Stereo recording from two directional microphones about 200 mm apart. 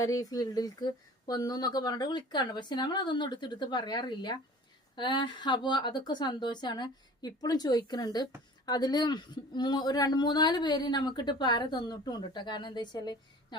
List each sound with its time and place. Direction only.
0.0 s speech: 15° left (ahead or behind)